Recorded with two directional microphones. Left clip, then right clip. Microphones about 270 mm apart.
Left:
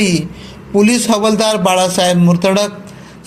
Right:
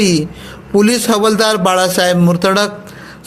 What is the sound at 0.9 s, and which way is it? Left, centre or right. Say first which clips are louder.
A man's voice: right 1 dB; right.